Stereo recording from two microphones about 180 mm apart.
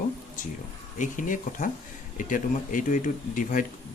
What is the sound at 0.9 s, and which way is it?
Speech, 45° left (ahead or behind).